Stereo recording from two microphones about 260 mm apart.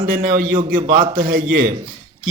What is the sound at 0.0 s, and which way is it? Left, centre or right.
Speech, right.